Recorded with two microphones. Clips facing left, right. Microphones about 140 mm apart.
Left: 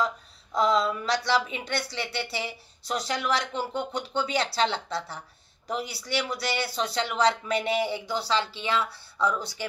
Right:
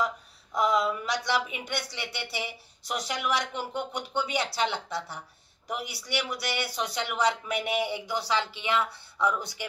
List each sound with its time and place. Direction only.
0.6 s speech: 15° right (ahead or behind)